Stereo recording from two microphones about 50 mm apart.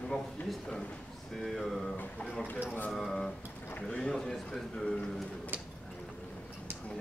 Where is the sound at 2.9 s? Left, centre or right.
Centre.